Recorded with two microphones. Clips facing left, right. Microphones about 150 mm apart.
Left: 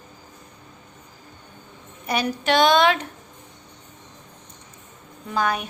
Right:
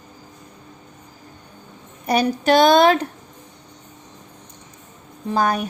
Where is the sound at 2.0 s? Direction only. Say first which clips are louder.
Right 5 dB; 40° right (ahead or behind).